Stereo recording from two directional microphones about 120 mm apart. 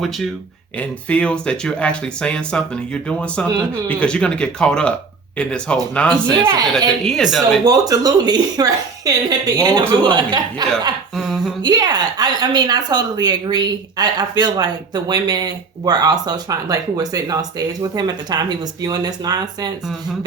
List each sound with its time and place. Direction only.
0.8 s speech: 10° left (ahead or behind)
7.6 s a woman's voice: 30° right (ahead or behind)
11.1 s a sound: centre (ahead or behind)
11.6 s a woman's voice: 35° right (ahead or behind)